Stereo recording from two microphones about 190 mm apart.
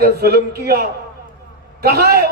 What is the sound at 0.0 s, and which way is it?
A man's voice, 55° right (ahead or behind).